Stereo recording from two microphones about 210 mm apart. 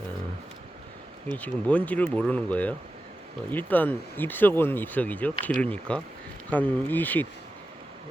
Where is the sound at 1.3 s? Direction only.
5° left (ahead or behind).